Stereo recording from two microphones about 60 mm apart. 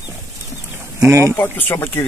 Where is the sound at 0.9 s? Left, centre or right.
Right.